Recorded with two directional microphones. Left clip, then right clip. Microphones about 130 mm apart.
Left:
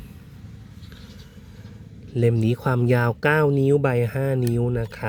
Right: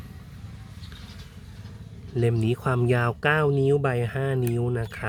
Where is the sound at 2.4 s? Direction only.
25° left (ahead or behind).